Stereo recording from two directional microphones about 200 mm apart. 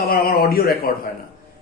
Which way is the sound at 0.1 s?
50° left (ahead or behind).